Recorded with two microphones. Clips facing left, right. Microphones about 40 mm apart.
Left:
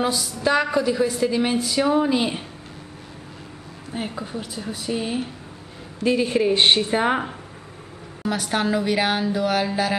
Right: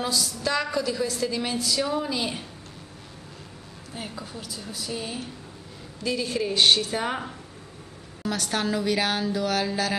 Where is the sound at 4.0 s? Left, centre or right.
Left.